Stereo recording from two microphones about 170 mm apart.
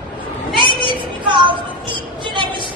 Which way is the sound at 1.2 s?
30° right (ahead or behind).